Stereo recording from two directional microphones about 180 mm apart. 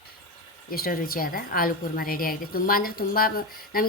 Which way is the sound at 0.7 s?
55° left (ahead or behind).